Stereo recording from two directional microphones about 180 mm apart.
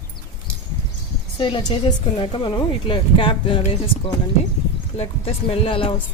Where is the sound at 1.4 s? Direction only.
25° left (ahead or behind).